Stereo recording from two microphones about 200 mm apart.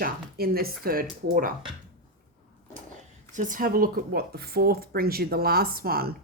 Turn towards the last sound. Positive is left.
turn(degrees=-50)  # may be behind; listen again after turning